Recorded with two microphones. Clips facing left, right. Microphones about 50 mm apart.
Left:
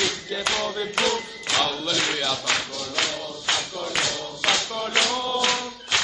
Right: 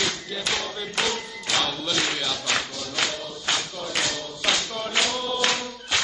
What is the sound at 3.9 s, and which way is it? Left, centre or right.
Clapping, centre.